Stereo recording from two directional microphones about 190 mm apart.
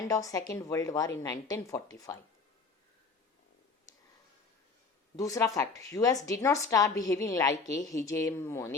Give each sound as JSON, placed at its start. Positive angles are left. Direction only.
{"t": 0.1, "sound": "a woman's voice", "side_deg": 15}
{"t": 5.1, "sound": "a woman's voice", "side_deg": 15}